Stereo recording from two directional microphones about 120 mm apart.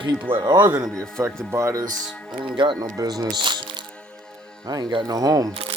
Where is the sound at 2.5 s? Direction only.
40° right (ahead or behind).